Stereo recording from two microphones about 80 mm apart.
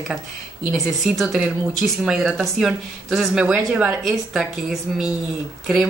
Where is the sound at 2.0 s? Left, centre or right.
Centre.